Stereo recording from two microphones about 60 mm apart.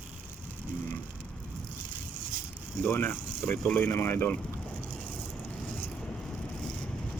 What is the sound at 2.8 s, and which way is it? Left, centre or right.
Speech, left.